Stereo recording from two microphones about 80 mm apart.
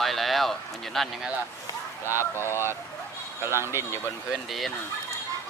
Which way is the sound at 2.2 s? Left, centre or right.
Left.